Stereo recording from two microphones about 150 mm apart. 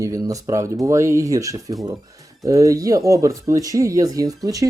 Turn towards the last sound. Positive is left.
turn(degrees=-25)  # may be behind; listen again after turning